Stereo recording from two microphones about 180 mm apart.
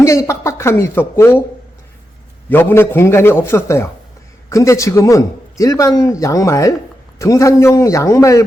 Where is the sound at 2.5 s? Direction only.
10° left (ahead or behind).